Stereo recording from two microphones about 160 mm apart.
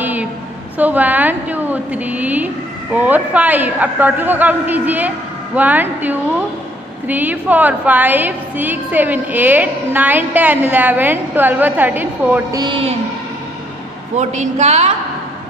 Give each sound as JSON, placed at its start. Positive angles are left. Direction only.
{"t": 0.0, "sound": "a sound", "side_deg": -10}
{"t": 0.7, "sound": "a woman's voice", "side_deg": -10}
{"t": 12.5, "sound": "a man's voice", "side_deg": -30}
{"t": 14.1, "sound": "a woman's voice", "side_deg": -45}